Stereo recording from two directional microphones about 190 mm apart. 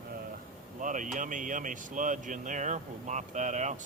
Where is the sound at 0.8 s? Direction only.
45° right (ahead or behind).